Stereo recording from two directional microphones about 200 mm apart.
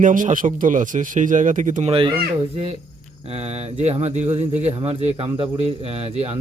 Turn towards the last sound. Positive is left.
turn(degrees=-30)  # may be behind; listen again after turning